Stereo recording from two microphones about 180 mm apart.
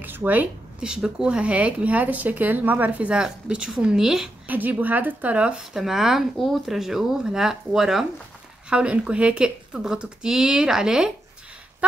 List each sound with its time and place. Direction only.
0.0 s speech: 10° right (ahead or behind)